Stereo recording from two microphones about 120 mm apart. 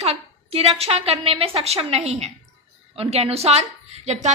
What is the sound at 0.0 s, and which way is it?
A woman's voice, 60° right (ahead or behind).